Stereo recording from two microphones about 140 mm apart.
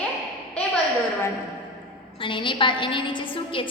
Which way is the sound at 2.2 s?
35° left (ahead or behind).